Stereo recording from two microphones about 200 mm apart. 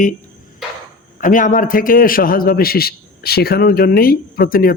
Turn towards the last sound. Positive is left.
turn(degrees=45)  # may be behind; listen again after turning